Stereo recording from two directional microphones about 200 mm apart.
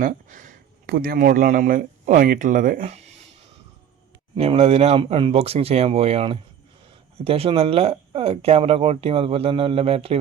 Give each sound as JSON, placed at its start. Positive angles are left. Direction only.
{"t": 0.0, "sound": "a man's voice", "side_deg": -40}
{"t": 4.4, "sound": "speech", "side_deg": -30}